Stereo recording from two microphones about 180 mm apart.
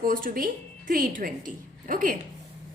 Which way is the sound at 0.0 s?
50° right (ahead or behind).